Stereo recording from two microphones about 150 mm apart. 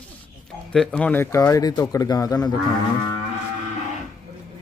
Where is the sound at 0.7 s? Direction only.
5° left (ahead or behind); by 2.5 s 25° left (ahead or behind).